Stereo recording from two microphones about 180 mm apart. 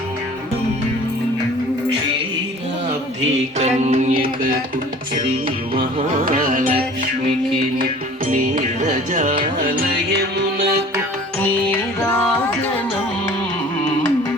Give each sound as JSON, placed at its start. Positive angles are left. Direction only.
{"t": 3.6, "sound": "music", "side_deg": -35}
{"t": 6.2, "sound": "music", "side_deg": -50}
{"t": 8.3, "sound": "music", "side_deg": -45}
{"t": 11.3, "sound": "music", "side_deg": 10}